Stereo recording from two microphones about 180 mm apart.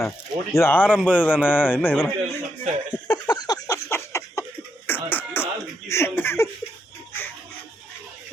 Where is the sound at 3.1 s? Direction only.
20° left (ahead or behind).